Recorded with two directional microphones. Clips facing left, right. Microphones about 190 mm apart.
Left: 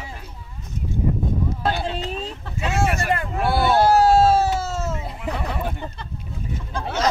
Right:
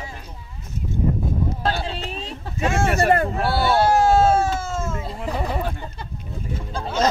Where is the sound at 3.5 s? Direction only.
20° left (ahead or behind).